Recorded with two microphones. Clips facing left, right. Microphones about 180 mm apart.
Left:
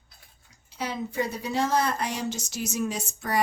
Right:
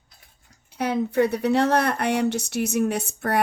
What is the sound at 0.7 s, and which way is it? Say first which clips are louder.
Speech: right 8 dB; 55° right (ahead or behind).